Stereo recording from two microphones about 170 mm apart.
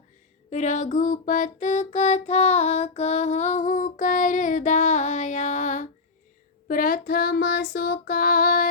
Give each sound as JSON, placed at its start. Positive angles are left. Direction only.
{"t": 0.5, "sound": "music", "side_deg": 45}
{"t": 6.7, "sound": "child singing", "side_deg": 55}